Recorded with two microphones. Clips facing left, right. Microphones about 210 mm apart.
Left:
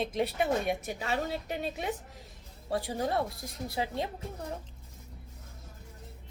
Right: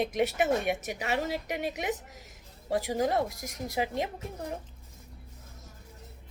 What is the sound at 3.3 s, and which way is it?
Speech, 90° right.